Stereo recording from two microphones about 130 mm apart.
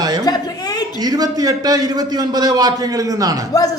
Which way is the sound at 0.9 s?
30° right (ahead or behind).